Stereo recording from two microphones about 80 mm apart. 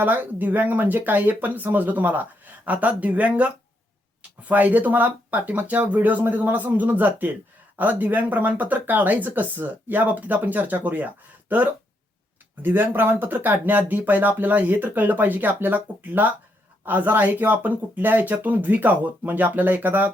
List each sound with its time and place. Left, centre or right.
0.0 s speech: right